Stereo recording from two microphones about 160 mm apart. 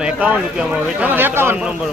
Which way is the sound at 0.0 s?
5° right (ahead or behind).